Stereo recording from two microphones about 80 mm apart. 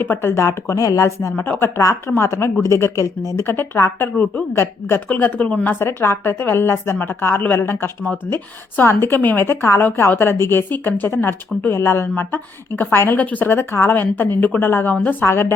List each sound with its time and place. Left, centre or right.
0.0 s a woman's voice: left
1.4 s a woman's voice: left
5.8 s a woman's voice: left